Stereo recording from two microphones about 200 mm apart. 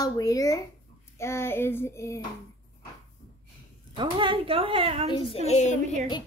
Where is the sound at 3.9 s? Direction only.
25° right (ahead or behind).